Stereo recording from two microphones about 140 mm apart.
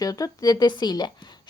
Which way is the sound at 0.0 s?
25° left (ahead or behind).